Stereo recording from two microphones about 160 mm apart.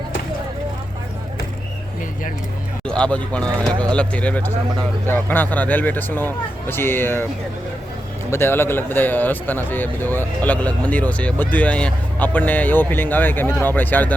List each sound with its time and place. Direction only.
2.8 s a man's voice: 5° left (ahead or behind)
3.4 s speech: 25° right (ahead or behind)
3.9 s a man's voice: 10° left (ahead or behind)
8.3 s a man's voice: 15° left (ahead or behind)